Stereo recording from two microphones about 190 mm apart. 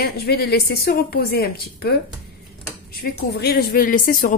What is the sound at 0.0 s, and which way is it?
Speech, 55° left (ahead or behind).